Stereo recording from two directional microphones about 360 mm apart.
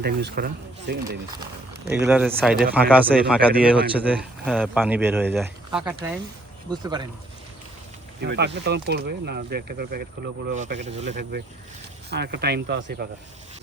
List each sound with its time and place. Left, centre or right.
0.0 s speech: right
1.9 s speech: centre
8.2 s speech: right